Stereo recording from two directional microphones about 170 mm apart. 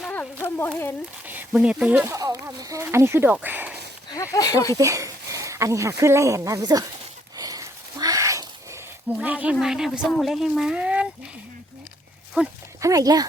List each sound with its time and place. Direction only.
0.0 s a sound: 10° left (ahead or behind)
0.4 s speech: 10° left (ahead or behind)
1.2 s speech: 10° right (ahead or behind)
2.1 s speech: 20° right (ahead or behind)
4.1 s speech: 20° left (ahead or behind)
4.8 s speech: 20° right (ahead or behind)
7.3 s wheeze: 20° right (ahead or behind)
9.1 s a woman's voice: 10° right (ahead or behind)
12.4 s speech: 10° right (ahead or behind)
12.8 s speech: 20° right (ahead or behind)